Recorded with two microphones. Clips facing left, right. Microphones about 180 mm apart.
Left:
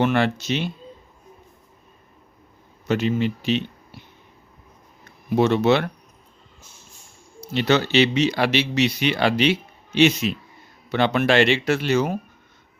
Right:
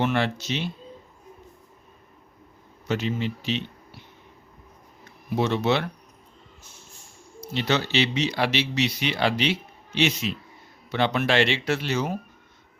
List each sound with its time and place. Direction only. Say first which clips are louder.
0.0 s speech: left 4 dB; 55° left (ahead or behind)
2.8 s speech: left 5 dB; 55° left (ahead or behind)
5.4 s speech: left 5 dB; 60° left (ahead or behind)
7.5 s a man's voice: left 6 dB; 60° left (ahead or behind)